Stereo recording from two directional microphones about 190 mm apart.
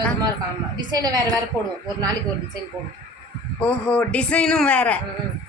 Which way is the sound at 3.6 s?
5° left (ahead or behind).